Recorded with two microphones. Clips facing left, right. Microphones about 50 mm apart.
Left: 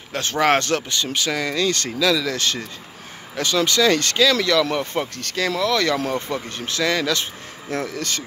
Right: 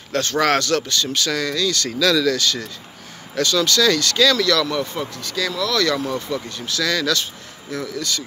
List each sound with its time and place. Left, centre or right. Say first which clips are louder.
0.1 s speech: even; left
1.6 s speech: even; left
1.9 s speech: right 2 dB; centre
2.3 s speech: right 2 dB; left
4.9 s speech: left 2 dB; left
5.6 s speech: even; left
5.9 s speech: even; left
7.7 s speech: even; left